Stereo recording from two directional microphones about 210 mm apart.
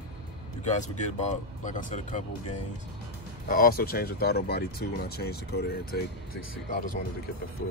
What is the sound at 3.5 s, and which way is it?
Speech, 45° left (ahead or behind).